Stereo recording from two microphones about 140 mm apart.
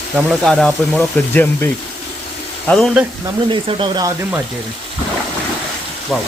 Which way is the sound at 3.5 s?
40° right (ahead or behind).